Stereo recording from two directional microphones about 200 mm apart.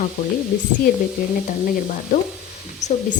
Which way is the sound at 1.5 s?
40° left (ahead or behind).